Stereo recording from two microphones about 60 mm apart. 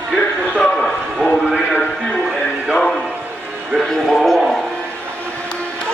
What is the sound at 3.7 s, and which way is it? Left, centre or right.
Music, centre.